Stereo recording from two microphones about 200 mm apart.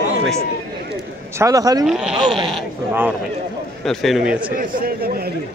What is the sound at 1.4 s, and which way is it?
Speech, 15° right (ahead or behind).